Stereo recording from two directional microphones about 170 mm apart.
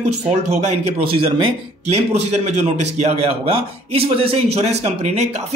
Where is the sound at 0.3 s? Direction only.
40° right (ahead or behind).